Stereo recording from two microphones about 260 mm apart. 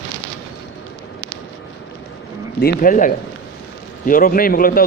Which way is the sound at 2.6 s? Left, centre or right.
Left.